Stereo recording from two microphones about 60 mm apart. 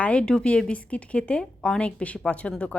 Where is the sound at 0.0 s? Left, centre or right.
Centre.